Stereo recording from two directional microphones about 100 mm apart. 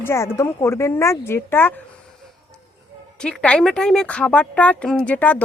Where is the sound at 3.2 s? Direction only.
10° left (ahead or behind).